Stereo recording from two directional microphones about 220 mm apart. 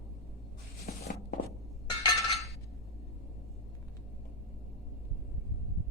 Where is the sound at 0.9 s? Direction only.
45° left (ahead or behind).